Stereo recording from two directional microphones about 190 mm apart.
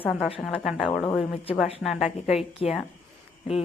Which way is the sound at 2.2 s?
35° left (ahead or behind).